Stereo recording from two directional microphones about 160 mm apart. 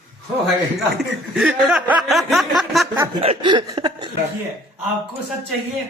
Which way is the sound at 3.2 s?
35° right (ahead or behind).